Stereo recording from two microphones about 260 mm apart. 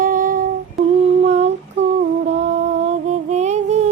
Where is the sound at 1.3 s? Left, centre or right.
Right.